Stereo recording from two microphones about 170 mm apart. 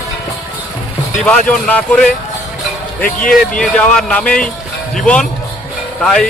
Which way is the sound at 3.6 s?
5° left (ahead or behind).